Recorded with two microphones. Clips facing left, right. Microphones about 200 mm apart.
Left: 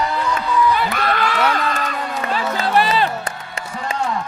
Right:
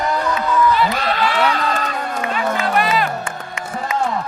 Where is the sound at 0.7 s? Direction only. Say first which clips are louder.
Right 2 dB; 50° left (ahead or behind).